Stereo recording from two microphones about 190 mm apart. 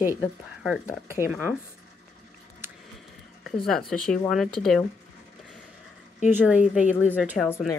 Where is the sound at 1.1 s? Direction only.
10° right (ahead or behind).